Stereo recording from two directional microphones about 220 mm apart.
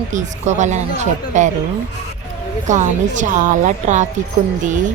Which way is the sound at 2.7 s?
35° right (ahead or behind).